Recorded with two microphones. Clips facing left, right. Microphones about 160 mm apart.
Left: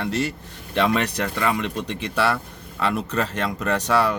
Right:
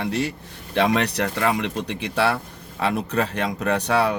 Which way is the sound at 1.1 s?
65° right (ahead or behind).